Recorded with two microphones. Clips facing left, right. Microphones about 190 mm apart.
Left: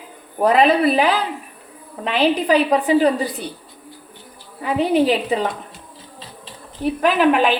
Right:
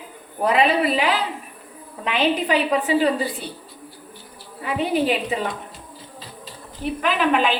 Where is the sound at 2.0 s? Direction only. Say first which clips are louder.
Left 4 dB; 35° left (ahead or behind).